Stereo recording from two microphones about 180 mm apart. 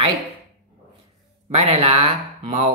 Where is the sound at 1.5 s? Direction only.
35° right (ahead or behind).